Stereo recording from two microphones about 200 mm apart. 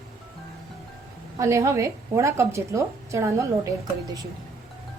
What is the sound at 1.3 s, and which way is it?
A woman's voice, 15° right (ahead or behind).